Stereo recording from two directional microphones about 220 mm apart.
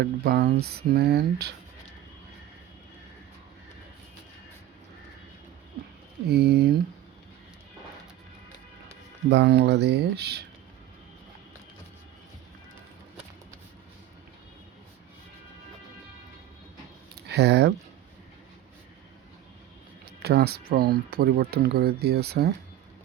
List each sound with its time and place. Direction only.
0.0 s speech: 45° right (ahead or behind)
6.2 s speech: 45° right (ahead or behind)
9.3 s speech: 50° right (ahead or behind)
17.2 s speech: 50° right (ahead or behind)
20.2 s speech: 45° right (ahead or behind)